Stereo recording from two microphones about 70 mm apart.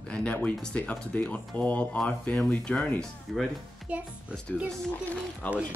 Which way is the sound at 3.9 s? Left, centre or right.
Centre.